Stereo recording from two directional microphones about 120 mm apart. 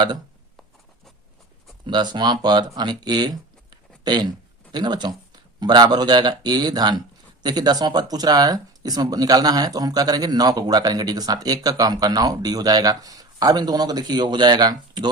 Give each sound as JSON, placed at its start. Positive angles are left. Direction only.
{"t": 1.9, "sound": "speech", "side_deg": -40}